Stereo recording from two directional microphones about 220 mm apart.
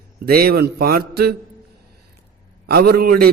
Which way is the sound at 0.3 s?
45° right (ahead or behind).